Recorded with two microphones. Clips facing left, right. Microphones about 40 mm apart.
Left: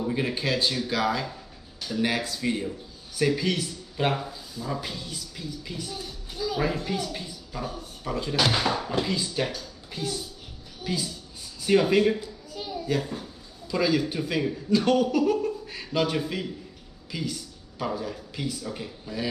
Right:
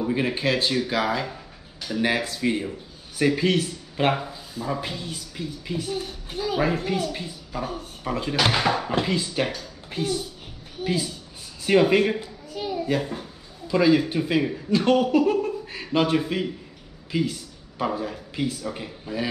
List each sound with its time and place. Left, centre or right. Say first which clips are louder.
0.0 s speech: right 4 dB; right
7.1 s a woman's voice: right 4 dB; centre; by 10.2 s right
10.8 s a sound: right 5 dB; right
11.6 s a child's voice: right 2 dB; right